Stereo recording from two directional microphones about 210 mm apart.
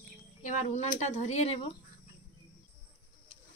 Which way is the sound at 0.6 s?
35° left (ahead or behind).